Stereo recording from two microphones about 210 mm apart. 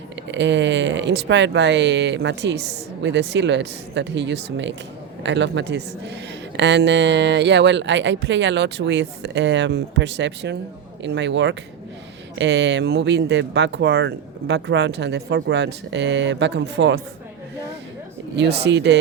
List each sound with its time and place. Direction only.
0.3 s speech: 60° right (ahead or behind)
18.3 s speech: 55° right (ahead or behind)